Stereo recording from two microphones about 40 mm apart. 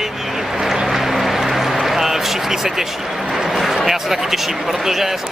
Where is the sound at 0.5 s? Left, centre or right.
Centre.